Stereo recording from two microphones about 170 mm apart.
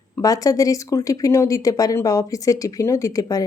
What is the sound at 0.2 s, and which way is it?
Speech, 20° left (ahead or behind).